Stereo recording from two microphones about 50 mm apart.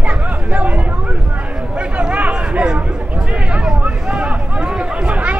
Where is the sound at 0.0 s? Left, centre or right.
Right.